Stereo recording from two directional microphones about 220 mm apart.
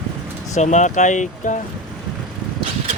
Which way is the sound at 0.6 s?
35° left (ahead or behind).